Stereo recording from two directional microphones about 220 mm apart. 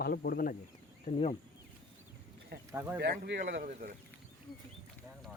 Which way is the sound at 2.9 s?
50° right (ahead or behind).